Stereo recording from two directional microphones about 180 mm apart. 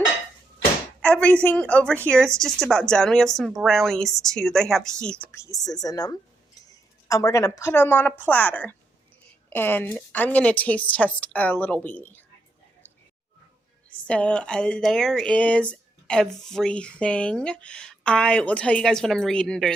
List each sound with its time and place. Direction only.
1.0 s speech: 5° left (ahead or behind)
5.3 s a woman's voice: 15° left (ahead or behind)
14.1 s speech: 5° left (ahead or behind)